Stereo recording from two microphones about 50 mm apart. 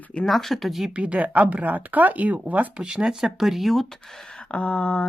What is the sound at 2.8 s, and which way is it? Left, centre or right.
Speech, centre.